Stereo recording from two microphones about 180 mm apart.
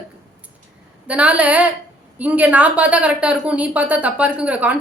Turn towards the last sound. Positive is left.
turn(degrees=-10)  # may be behind; listen again after turning